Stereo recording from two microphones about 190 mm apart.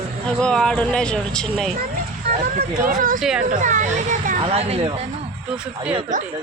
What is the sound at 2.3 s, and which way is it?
Speech, 50° right (ahead or behind).